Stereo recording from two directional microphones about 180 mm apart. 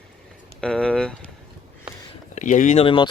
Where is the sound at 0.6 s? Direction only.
5° left (ahead or behind).